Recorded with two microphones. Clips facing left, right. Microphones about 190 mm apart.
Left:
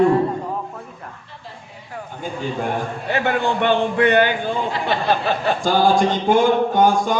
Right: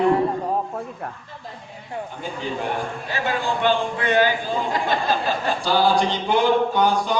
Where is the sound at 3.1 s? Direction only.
60° left (ahead or behind).